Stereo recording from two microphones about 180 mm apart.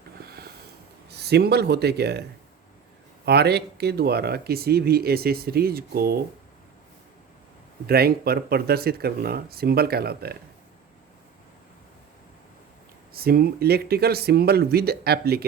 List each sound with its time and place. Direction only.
1.1 s speech: 65° right (ahead or behind)
3.2 s speech: 65° right (ahead or behind)
7.9 s speech: 60° right (ahead or behind)
13.1 s speech: 55° right (ahead or behind)